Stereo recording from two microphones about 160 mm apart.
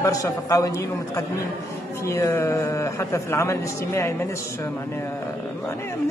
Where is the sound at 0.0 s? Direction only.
20° left (ahead or behind).